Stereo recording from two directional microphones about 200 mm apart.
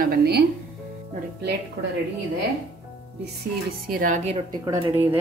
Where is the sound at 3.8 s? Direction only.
45° right (ahead or behind).